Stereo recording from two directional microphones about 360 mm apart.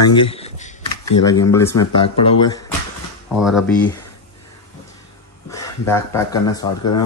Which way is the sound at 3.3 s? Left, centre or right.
Centre.